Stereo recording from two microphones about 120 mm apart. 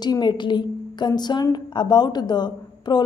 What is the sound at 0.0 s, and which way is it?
Speech, 35° left (ahead or behind).